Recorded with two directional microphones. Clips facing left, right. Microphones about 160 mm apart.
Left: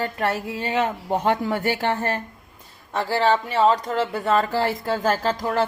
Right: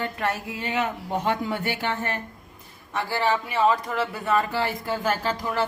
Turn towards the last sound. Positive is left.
turn(degrees=40)  # may be behind; listen again after turning